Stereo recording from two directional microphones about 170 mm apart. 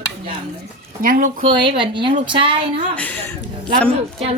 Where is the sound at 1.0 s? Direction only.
55° right (ahead or behind).